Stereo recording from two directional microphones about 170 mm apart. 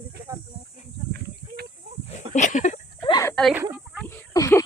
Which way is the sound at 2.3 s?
45° left (ahead or behind).